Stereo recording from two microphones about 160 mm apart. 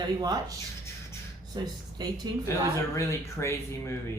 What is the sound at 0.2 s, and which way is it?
Speech, 25° right (ahead or behind).